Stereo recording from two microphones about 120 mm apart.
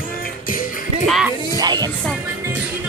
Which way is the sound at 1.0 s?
Centre (ahead or behind).